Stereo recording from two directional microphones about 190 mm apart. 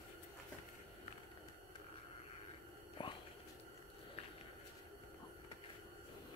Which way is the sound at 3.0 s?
25° left (ahead or behind).